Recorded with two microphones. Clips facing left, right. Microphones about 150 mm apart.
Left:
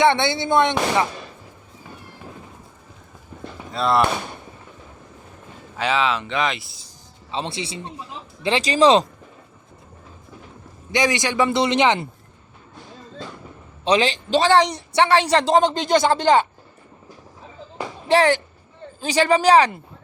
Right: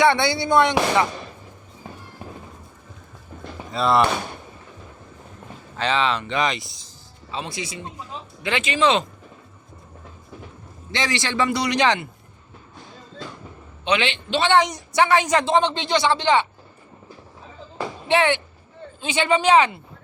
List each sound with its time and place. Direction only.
0.0 s speech: 25° left (ahead or behind)
3.7 s speech: centre (ahead or behind)
5.7 s speech: 5° left (ahead or behind)
7.3 s a man's voice: 30° left (ahead or behind)
10.9 s speech: 15° left (ahead or behind)
13.8 s a man's voice: 35° left (ahead or behind)
18.1 s a man's voice: 40° left (ahead or behind)